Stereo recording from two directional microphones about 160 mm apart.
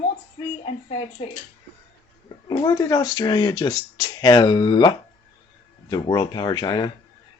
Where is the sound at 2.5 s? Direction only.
25° left (ahead or behind).